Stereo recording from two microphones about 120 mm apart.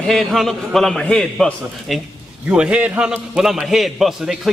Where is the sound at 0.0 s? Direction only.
Centre (ahead or behind).